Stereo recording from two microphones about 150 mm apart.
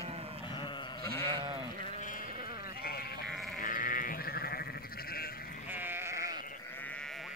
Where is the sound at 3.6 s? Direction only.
65° left (ahead or behind); by 5.2 s 85° left.